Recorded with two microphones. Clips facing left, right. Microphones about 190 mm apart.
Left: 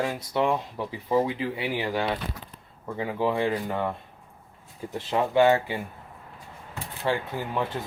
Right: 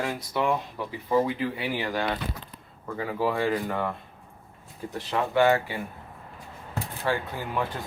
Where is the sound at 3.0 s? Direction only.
20° left (ahead or behind).